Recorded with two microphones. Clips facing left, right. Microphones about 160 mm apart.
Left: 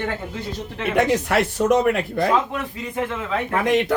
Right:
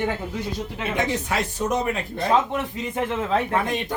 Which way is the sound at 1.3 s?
75° left (ahead or behind).